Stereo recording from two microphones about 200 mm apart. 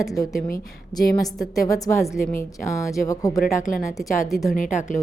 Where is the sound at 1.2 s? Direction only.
15° left (ahead or behind).